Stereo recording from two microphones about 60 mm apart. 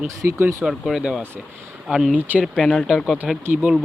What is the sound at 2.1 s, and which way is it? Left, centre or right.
Speech, right.